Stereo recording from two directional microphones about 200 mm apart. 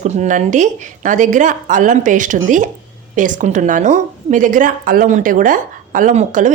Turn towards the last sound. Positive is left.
turn(degrees=-40)  # may be behind; listen again after turning